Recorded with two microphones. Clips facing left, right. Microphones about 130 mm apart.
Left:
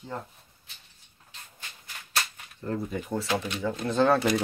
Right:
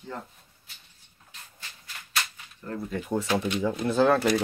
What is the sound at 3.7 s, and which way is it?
Speech, 5° right (ahead or behind).